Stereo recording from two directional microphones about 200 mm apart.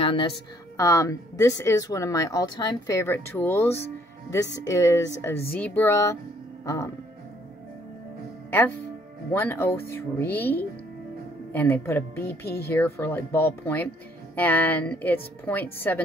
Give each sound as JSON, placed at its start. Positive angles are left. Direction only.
{"t": 0.0, "sound": "a woman's voice", "side_deg": 25}
{"t": 0.7, "sound": "speech", "side_deg": 15}
{"t": 8.5, "sound": "speech", "side_deg": 10}